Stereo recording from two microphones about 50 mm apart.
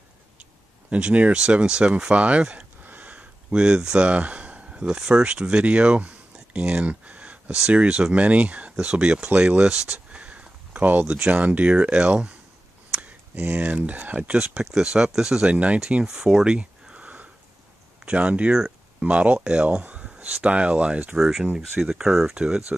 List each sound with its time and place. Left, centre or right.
0.4 s speech: right
2.1 s speech: right
2.5 s a sound: right; by 4.1 s centre
4.1 s speech: right
14.3 s speech: centre
16.1 s a sound: centre; by 17.3 s right
18.0 s speech: right
19.4 s a sound: right
20.4 s speech: right
21.2 s speech: centre
22.4 s speech: centre